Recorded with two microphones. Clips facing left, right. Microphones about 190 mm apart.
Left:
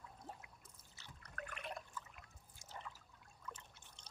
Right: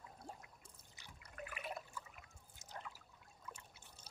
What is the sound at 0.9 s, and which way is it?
Liquid, 10° right (ahead or behind).